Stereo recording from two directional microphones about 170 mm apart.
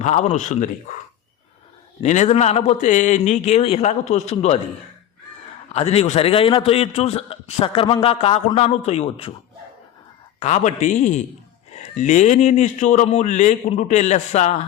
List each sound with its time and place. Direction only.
0.0 s a man's voice: 45° left (ahead or behind)
2.0 s a man's voice: 40° left (ahead or behind)
5.7 s a man's voice: 40° left (ahead or behind)
10.4 s a man's voice: 45° left (ahead or behind)